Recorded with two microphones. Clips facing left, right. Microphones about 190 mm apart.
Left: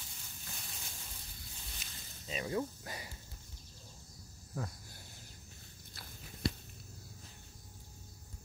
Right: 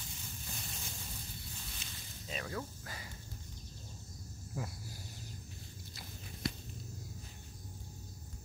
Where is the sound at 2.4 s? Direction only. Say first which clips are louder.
Left 6 dB; 20° left (ahead or behind).